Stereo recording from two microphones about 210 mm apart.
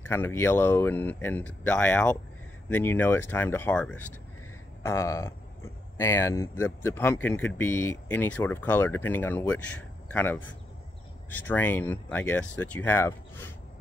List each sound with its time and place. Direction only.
0.0 s speech: 10° left (ahead or behind)
11.4 s speech: 10° left (ahead or behind)